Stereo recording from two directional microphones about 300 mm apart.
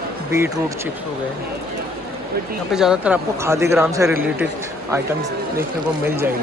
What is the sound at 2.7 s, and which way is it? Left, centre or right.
Speech, centre.